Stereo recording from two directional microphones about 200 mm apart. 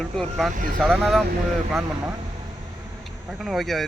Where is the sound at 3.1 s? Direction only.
Centre (ahead or behind).